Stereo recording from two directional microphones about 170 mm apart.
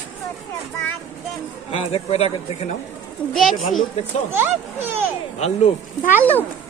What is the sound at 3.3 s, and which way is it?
Speech, centre (ahead or behind).